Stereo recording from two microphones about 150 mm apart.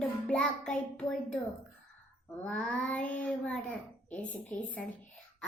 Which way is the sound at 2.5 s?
10° left (ahead or behind).